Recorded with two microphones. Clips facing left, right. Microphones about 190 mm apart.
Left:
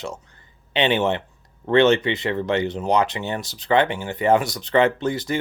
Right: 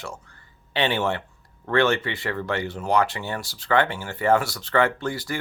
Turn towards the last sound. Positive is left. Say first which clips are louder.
# left 5 dB
turn(degrees=20)  # may be behind; listen again after turning